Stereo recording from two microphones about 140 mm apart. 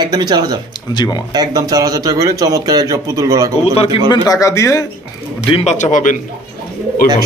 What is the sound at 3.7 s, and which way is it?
Speech, 45° left (ahead or behind).